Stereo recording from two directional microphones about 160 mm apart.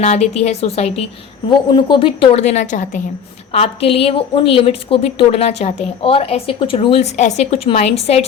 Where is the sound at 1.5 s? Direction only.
30° left (ahead or behind); by 3.0 s 50° left (ahead or behind).